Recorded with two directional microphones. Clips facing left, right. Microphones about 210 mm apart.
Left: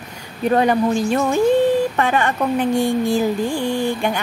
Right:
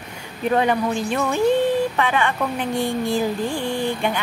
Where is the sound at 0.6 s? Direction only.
40° left (ahead or behind).